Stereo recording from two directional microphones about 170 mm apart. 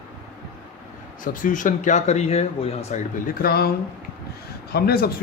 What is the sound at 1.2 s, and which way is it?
Speech, 50° left (ahead or behind).